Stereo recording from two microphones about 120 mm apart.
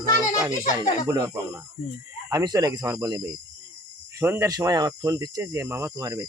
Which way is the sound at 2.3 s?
35° right (ahead or behind).